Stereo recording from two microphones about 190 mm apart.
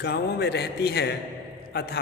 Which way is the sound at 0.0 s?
60° left (ahead or behind).